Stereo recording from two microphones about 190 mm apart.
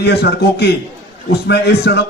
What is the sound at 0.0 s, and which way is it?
Music, 60° left (ahead or behind).